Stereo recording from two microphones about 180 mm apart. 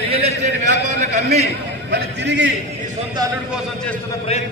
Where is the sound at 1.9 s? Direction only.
75° right (ahead or behind).